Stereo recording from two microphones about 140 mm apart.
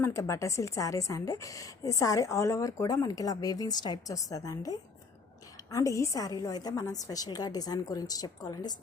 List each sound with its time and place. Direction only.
0.0 s a woman's voice: 20° left (ahead or behind)